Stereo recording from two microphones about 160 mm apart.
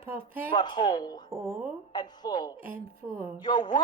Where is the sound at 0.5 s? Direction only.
30° left (ahead or behind).